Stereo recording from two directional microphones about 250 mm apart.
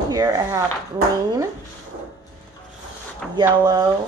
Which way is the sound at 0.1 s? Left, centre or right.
Centre.